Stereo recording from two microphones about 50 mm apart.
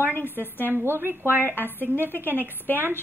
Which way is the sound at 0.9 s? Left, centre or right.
Right.